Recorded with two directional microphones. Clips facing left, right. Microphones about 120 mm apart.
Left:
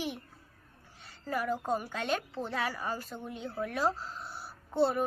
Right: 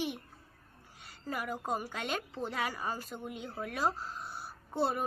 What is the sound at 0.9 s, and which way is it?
A woman's voice, 15° right (ahead or behind).